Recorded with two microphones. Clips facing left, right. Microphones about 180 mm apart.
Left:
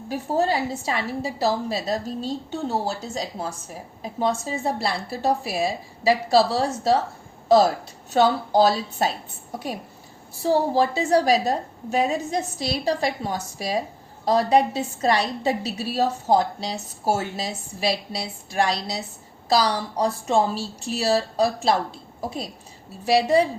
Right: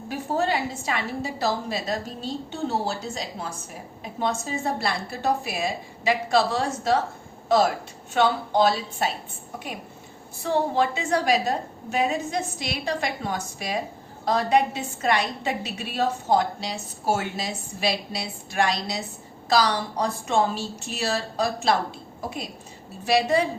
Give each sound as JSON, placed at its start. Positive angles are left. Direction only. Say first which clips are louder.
{"t": 0.1, "sound": "a woman's voice", "louder": "left 2 dB", "side_deg": 35}
{"t": 10.3, "sound": "a woman's voice", "louder": "left 3 dB", "side_deg": 35}
{"t": 23.0, "sound": "a woman's voice", "louder": "left 3 dB", "side_deg": 35}